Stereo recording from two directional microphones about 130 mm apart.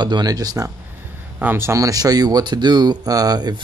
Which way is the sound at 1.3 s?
15° right (ahead or behind).